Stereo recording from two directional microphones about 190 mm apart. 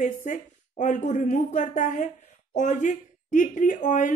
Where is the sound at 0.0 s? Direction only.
40° left (ahead or behind).